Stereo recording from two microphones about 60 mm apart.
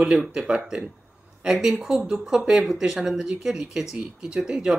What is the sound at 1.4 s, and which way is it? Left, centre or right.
Speech, centre.